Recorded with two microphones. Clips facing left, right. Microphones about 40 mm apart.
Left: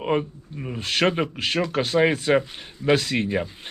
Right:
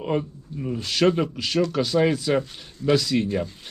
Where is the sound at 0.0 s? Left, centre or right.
Left.